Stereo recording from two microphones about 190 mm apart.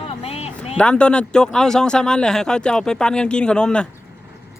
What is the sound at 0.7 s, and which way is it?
Speech, 5° left (ahead or behind).